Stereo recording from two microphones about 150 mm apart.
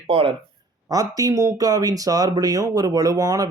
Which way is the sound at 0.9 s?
25° right (ahead or behind).